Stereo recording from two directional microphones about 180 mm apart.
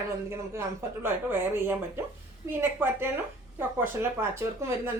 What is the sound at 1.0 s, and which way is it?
Speech, 10° right (ahead or behind).